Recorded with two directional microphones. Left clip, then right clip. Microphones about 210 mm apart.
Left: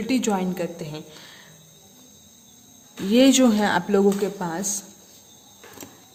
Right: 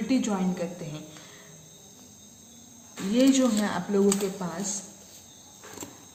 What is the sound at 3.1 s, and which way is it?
A woman's voice, 55° left (ahead or behind).